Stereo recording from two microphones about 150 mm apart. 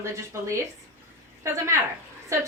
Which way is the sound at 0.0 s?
20° right (ahead or behind).